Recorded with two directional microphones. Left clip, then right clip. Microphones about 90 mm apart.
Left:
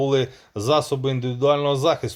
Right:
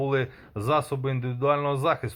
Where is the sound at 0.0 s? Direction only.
35° left (ahead or behind).